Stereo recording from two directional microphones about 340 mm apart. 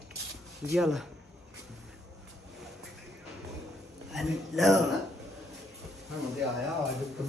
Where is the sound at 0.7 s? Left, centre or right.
Centre.